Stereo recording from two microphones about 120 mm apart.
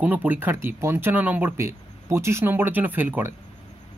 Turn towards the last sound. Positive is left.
turn(degrees=-15)  # may be behind; listen again after turning